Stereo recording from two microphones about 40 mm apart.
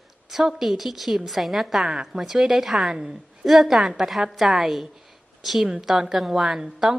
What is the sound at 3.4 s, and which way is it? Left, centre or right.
A woman's voice, centre.